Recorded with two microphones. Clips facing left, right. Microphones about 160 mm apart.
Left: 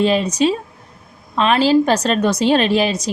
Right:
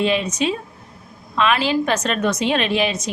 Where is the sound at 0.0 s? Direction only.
35° left (ahead or behind).